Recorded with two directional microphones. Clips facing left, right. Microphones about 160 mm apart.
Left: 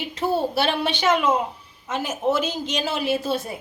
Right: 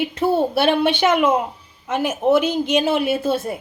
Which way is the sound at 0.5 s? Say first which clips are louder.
Right 6 dB; 55° right (ahead or behind).